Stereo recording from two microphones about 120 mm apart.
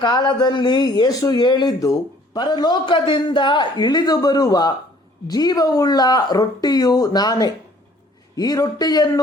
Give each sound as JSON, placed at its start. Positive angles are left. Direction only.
{"t": 0.0, "sound": "speech", "side_deg": 40}